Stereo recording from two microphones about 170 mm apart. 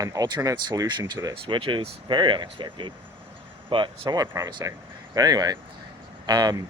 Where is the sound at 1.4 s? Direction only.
30° right (ahead or behind).